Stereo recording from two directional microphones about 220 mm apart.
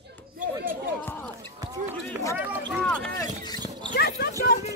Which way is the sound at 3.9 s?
45° left (ahead or behind).